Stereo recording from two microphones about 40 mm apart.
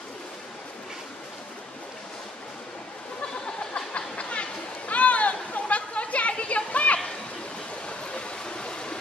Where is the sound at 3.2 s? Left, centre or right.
Left.